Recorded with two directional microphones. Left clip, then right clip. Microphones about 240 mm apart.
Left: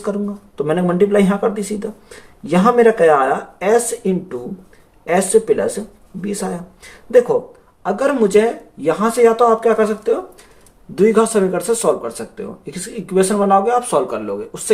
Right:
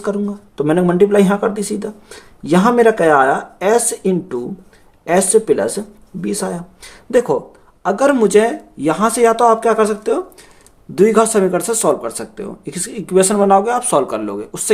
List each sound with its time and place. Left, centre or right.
0.0 s speech: right